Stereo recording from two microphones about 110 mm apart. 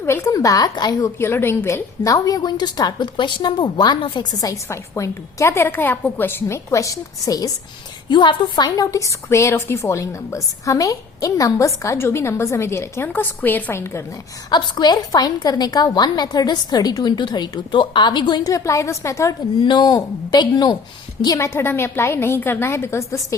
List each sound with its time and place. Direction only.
0.0 s a woman's voice: 25° left (ahead or behind)
8.1 s a woman's voice: 45° left (ahead or behind); by 14.0 s 25° left (ahead or behind)
14.5 s a woman's voice: 40° left (ahead or behind)
18.5 s a woman's voice: 30° left (ahead or behind)
19.6 s a woman's voice: 40° left (ahead or behind)
21.3 s a woman's voice: 25° left (ahead or behind)